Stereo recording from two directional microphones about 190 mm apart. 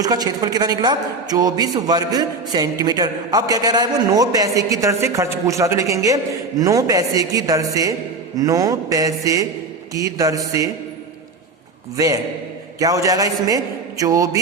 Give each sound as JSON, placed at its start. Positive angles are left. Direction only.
{"t": 0.0, "sound": "a woman's voice", "side_deg": -20}
{"t": 11.9, "sound": "a man's voice", "side_deg": -20}